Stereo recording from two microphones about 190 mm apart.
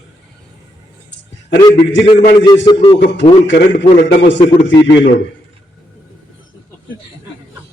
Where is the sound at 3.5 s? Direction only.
65° left (ahead or behind).